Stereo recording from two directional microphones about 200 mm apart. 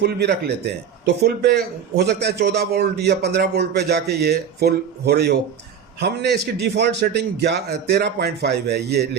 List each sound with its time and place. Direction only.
0.0 s a man's voice: 55° right (ahead or behind)